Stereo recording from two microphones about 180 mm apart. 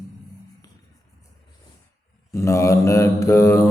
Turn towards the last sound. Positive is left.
turn(degrees=15)  # may be behind; listen again after turning